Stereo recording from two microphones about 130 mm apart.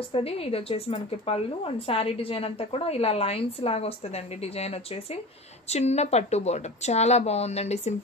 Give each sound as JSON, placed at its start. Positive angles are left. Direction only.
{"t": 0.1, "sound": "a woman's voice", "side_deg": 50}